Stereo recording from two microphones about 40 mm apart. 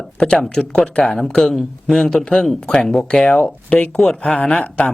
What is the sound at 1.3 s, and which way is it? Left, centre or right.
Speech, centre.